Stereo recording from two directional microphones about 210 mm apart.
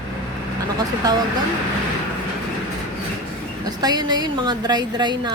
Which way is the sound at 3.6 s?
20° right (ahead or behind).